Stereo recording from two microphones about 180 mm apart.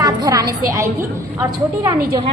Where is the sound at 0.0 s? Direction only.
20° right (ahead or behind).